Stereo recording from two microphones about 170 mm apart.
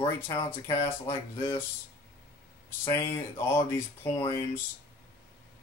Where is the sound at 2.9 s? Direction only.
15° left (ahead or behind).